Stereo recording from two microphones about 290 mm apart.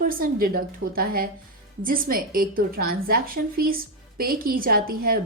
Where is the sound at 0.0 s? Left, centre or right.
Right.